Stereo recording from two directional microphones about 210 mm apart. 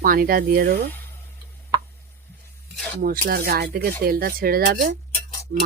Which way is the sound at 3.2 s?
45° right (ahead or behind).